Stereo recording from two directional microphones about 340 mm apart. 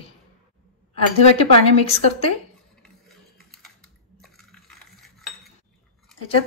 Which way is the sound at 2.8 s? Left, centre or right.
Centre.